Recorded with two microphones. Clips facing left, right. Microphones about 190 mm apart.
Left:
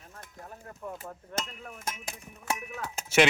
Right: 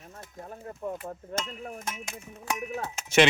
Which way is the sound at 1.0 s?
30° right (ahead or behind).